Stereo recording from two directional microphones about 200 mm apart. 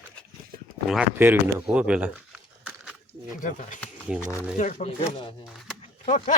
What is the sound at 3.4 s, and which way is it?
Speech, 40° left (ahead or behind).